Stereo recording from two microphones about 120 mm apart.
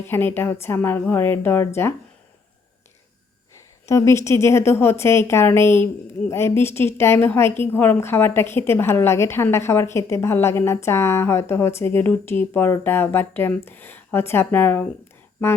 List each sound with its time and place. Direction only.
0.0 s a woman's voice: 15° left (ahead or behind)
3.8 s a woman's voice: 25° left (ahead or behind)